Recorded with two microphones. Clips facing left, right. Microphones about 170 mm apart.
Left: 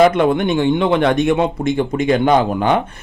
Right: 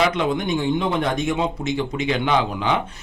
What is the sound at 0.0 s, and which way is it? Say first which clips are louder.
A man's voice: left 8 dB; 55° left (ahead or behind).